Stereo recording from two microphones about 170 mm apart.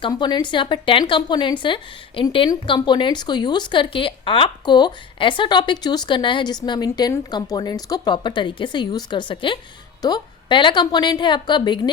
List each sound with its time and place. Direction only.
0.0 s a woman's voice: 25° left (ahead or behind)